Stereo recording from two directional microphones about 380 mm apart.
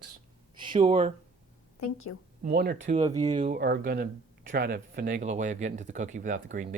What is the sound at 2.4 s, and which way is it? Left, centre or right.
Speech, right.